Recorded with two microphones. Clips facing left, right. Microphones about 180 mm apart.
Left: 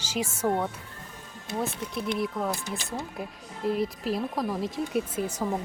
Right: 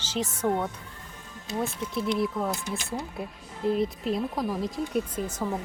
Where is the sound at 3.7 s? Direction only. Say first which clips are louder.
Right 1 dB; centre (ahead or behind).